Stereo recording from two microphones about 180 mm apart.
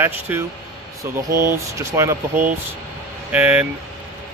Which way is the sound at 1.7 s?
15° right (ahead or behind).